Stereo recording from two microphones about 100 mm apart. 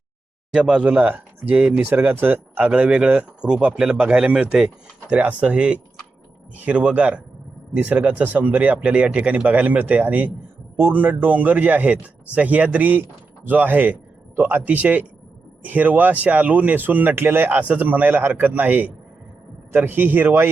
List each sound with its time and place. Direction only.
0.7 s a man's voice: 10° right (ahead or behind)